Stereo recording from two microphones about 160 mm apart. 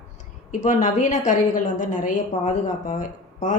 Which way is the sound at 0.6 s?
50° left (ahead or behind).